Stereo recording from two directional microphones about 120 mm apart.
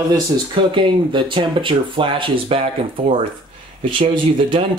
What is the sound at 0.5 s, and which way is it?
Speech, 45° right (ahead or behind).